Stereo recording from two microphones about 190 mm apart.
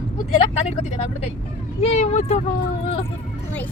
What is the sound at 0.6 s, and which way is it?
Speech, 35° left (ahead or behind).